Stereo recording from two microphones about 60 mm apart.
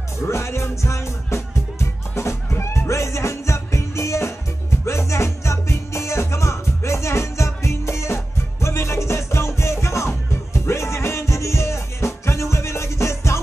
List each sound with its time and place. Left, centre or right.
0.3 s music: left